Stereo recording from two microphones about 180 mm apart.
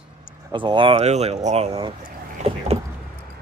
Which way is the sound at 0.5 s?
25° right (ahead or behind).